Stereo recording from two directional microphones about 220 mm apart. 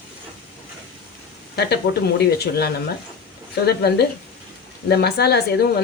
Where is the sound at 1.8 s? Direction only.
45° left (ahead or behind).